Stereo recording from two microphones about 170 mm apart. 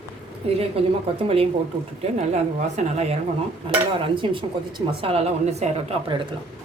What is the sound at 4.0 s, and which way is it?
A woman's voice, 30° right (ahead or behind).